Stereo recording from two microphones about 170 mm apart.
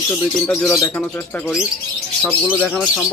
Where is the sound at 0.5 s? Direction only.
15° left (ahead or behind).